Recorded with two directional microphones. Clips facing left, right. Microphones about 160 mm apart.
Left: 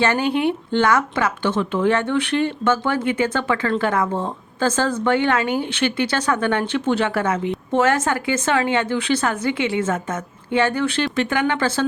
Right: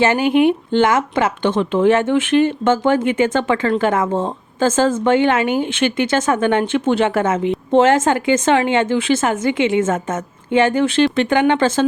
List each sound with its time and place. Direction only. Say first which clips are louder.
0.0 s speech: right 5 dB; 20° right (ahead or behind)